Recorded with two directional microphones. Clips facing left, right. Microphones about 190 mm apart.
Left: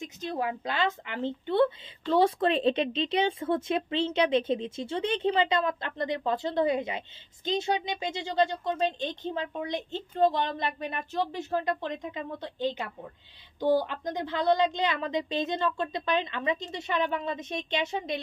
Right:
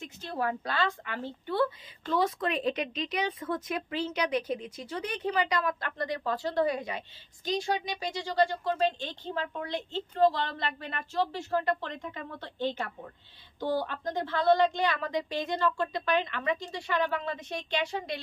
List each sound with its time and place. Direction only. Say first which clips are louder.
0.0 s a woman's voice: left 1 dB; 15° left (ahead or behind)